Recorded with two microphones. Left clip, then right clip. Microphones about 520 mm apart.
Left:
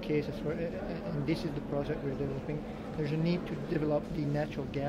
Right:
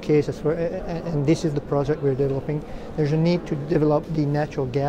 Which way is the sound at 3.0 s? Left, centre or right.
Right.